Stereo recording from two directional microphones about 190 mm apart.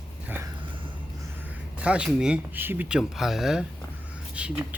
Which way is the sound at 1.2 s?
10° right (ahead or behind).